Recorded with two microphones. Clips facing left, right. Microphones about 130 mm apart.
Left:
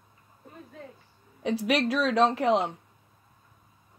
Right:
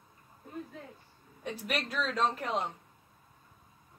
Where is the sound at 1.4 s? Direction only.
90° left.